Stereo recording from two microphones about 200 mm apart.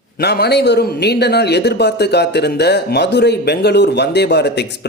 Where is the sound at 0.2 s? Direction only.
55° left (ahead or behind).